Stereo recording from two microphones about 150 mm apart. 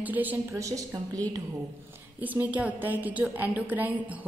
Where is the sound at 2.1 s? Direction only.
10° right (ahead or behind).